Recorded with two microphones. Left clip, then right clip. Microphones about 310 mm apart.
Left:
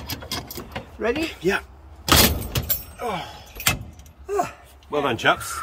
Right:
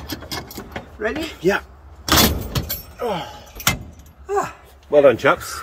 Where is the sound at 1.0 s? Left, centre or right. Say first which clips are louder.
Right 1 dB; centre.